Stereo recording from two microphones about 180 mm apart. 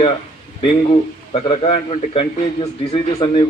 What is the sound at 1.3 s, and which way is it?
A man's voice, 35° left (ahead or behind).